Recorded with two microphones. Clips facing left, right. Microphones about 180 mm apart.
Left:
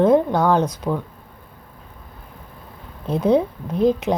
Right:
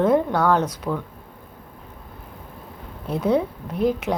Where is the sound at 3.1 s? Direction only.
20° left (ahead or behind).